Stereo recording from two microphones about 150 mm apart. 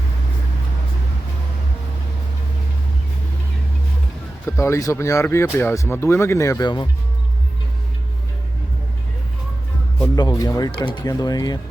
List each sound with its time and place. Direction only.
4.4 s speech: 20° left (ahead or behind)
10.2 s speech: 25° left (ahead or behind)